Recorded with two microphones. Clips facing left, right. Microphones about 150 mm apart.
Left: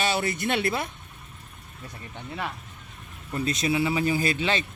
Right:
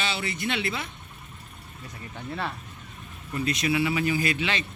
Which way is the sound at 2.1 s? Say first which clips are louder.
Right 1 dB; 15° left (ahead or behind).